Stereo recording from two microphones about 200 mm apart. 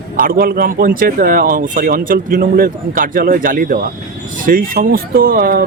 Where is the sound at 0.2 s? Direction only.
45° right (ahead or behind).